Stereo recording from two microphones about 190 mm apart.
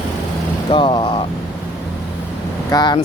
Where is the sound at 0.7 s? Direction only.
25° left (ahead or behind).